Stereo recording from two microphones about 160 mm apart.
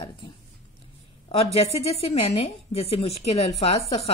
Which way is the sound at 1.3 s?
40° left (ahead or behind).